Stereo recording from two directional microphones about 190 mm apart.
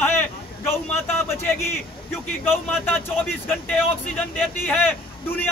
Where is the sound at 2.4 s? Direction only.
10° left (ahead or behind).